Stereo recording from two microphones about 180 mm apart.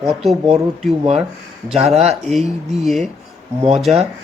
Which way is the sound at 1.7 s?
35° right (ahead or behind).